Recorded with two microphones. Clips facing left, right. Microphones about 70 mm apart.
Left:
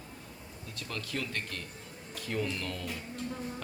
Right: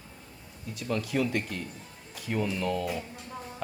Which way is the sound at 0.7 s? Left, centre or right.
Centre.